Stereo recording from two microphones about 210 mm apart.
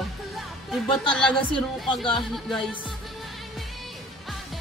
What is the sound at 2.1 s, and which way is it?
Music, centre (ahead or behind).